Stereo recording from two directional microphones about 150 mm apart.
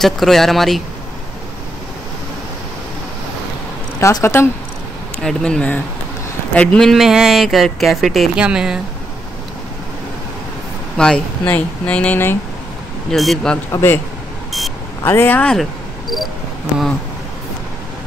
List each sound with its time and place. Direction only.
0.0 s speech: centre (ahead or behind)
4.0 s a woman's voice: 20° left (ahead or behind)
5.2 s speech: 5° left (ahead or behind)
11.0 s speech: 10° left (ahead or behind)
13.1 s speech: centre (ahead or behind)
13.7 s a woman's voice: 20° left (ahead or behind)
15.0 s speech: 15° left (ahead or behind)